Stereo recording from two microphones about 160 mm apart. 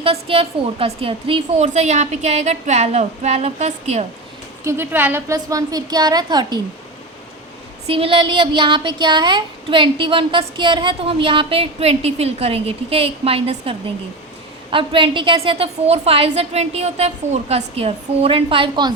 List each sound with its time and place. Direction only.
0.0 s a woman's voice: 35° right (ahead or behind)
4.6 s a woman's voice: 15° right (ahead or behind)
7.9 s speech: 35° right (ahead or behind)